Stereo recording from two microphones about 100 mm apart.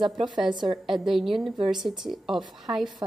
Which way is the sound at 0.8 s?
5° right (ahead or behind).